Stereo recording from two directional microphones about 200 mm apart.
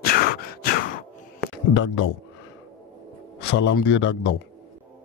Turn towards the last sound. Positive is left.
turn(degrees=65)  # may be behind; listen again after turning